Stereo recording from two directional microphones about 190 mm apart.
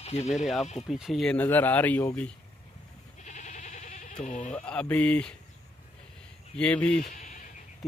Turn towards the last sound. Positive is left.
turn(degrees=40)  # may be behind; listen again after turning